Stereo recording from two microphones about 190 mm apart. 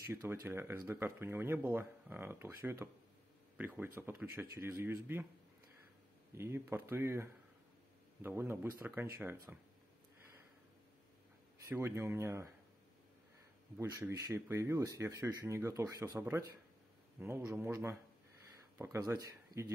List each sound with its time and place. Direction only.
0.1 s speech: 15° right (ahead or behind)
6.3 s speech: 15° right (ahead or behind)
11.6 s speech: 15° right (ahead or behind)
13.7 s speech: 15° right (ahead or behind)